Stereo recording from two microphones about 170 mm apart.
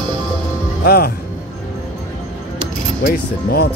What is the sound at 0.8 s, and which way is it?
Speech, 65° left (ahead or behind).